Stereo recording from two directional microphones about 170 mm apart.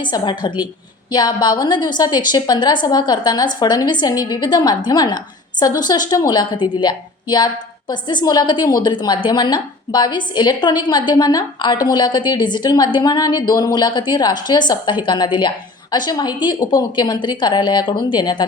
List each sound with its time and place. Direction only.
0.0 s a woman's voice: 25° left (ahead or behind)